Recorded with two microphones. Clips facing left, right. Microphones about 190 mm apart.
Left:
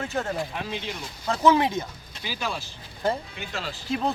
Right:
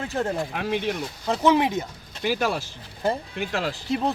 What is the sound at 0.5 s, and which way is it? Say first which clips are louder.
Speech: right 7 dB; 60° right (ahead or behind).